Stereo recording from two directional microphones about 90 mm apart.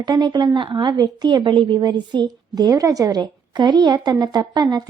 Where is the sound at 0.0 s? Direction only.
55° right (ahead or behind).